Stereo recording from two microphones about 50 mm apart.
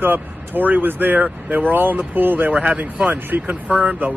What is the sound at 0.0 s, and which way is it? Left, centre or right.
Speech, right.